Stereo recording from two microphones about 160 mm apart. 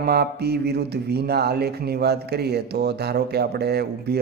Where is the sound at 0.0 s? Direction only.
80° right.